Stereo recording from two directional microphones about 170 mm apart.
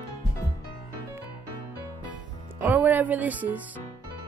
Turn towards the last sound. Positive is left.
turn(degrees=-10)  # may be behind; listen again after turning